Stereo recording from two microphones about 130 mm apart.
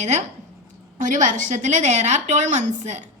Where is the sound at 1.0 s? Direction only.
75° right (ahead or behind).